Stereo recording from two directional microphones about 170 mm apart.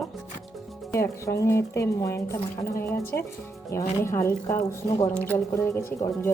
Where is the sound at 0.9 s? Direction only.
15° left (ahead or behind).